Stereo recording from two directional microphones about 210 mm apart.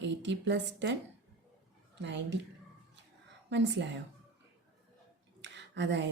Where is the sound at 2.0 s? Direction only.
55° right (ahead or behind).